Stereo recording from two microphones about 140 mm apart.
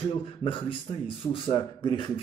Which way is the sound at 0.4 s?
40° left (ahead or behind).